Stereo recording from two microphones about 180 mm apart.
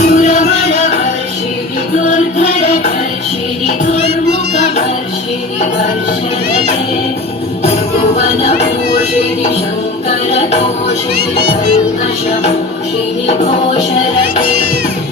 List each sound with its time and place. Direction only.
0.0 s music: 40° left (ahead or behind)
2.4 s music: 40° left (ahead or behind)
8.4 s music: 35° left (ahead or behind)
10.1 s music: 35° left (ahead or behind)